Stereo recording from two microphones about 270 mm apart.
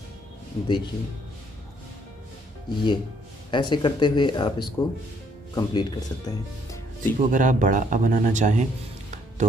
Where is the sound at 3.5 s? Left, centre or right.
Centre.